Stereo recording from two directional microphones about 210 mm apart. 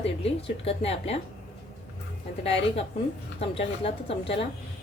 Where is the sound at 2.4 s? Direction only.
30° left (ahead or behind).